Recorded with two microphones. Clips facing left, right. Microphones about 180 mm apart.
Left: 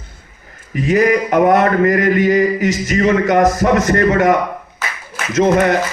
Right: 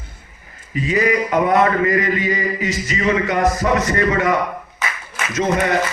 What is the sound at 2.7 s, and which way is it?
A man's voice, 45° left (ahead or behind).